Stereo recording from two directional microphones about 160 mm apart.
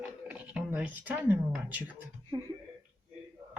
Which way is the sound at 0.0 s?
5° right (ahead or behind).